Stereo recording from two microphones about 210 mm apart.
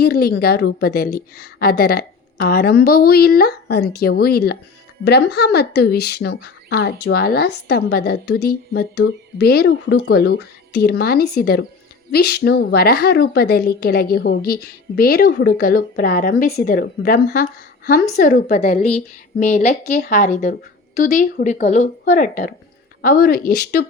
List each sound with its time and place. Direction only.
0.0 s a woman's voice: 45° left (ahead or behind)